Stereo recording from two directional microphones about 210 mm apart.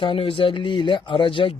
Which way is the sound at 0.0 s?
25° left (ahead or behind).